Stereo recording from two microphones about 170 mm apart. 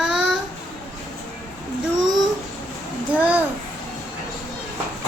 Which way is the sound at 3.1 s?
10° right (ahead or behind).